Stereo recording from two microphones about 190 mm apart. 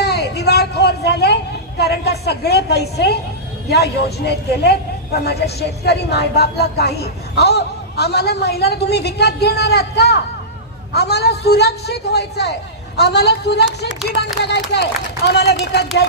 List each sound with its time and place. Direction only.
0.0 s vehicle: 60° left (ahead or behind)
3.6 s speech: 60° left (ahead or behind)